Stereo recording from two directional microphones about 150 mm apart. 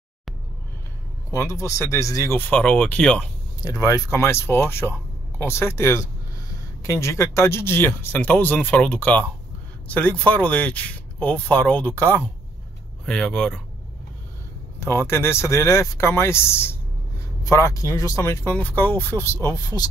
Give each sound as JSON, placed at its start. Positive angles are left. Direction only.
{"t": 1.3, "sound": "speech", "side_deg": 20}
{"t": 3.6, "sound": "speech", "side_deg": 20}
{"t": 14.8, "sound": "speech", "side_deg": 15}